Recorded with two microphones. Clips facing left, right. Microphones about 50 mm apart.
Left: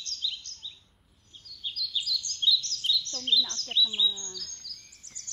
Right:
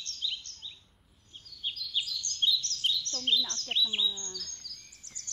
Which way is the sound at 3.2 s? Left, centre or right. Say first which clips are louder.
Left 2 dB; right.